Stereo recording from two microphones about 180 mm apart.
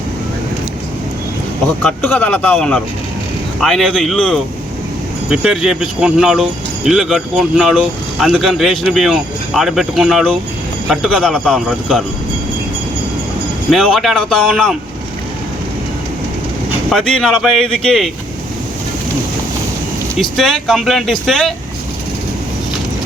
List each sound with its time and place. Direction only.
1.8 s speech: 10° left (ahead or behind)
13.7 s speech: centre (ahead or behind)
16.9 s speech: 5° left (ahead or behind)
20.1 s speech: centre (ahead or behind)